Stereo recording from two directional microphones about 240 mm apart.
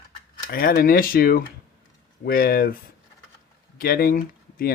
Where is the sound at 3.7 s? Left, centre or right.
Left.